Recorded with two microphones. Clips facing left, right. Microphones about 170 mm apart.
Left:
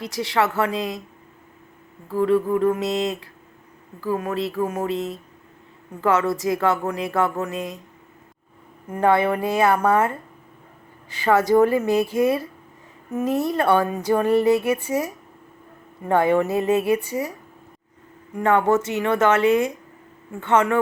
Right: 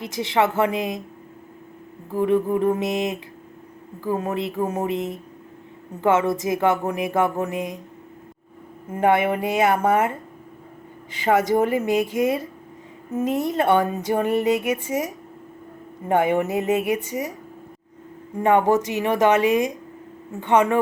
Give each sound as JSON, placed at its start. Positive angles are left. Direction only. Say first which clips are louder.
{"t": 0.0, "sound": "a woman's voice", "louder": "right 1 dB", "side_deg": -20}
{"t": 2.0, "sound": "a woman's voice", "louder": "left 1 dB", "side_deg": -20}
{"t": 8.9, "sound": "a woman's voice", "louder": "even", "side_deg": -20}
{"t": 11.1, "sound": "a woman's voice", "louder": "left 2 dB", "side_deg": -20}
{"t": 18.3, "sound": "a woman's voice", "louder": "right 1 dB", "side_deg": -20}